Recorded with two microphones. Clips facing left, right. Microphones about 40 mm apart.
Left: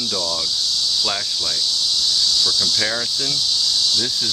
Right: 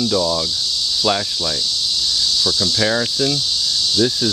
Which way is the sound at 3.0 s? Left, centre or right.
Centre.